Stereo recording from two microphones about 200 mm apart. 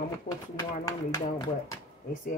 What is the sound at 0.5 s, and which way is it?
Speech, 20° left (ahead or behind).